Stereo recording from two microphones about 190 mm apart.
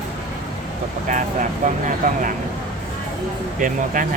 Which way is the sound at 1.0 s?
40° right (ahead or behind).